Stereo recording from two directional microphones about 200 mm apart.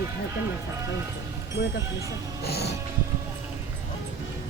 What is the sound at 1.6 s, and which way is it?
Music, 50° left (ahead or behind).